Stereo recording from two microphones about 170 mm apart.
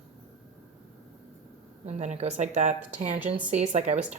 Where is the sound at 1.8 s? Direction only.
45° right (ahead or behind).